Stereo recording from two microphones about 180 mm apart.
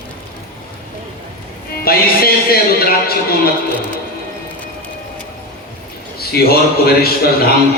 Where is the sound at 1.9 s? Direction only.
55° left (ahead or behind).